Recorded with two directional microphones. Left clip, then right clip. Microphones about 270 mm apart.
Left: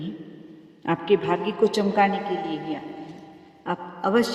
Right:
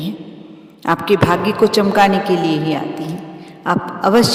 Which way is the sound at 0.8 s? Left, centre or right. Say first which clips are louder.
Right 8 dB; right.